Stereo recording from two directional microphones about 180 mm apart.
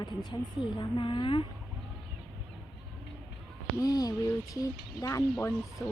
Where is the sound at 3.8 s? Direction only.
20° left (ahead or behind).